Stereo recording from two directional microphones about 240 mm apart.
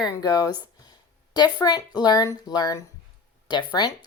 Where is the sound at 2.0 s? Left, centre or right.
Centre.